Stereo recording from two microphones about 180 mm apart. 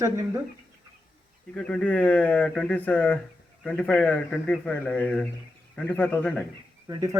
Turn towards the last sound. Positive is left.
turn(degrees=-15)  # may be behind; listen again after turning